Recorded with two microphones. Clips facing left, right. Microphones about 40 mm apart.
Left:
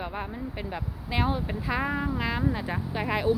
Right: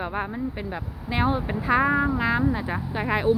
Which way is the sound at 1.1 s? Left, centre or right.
Centre.